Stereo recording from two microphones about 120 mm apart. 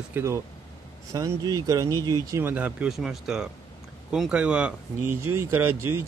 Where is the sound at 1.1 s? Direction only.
30° right (ahead or behind).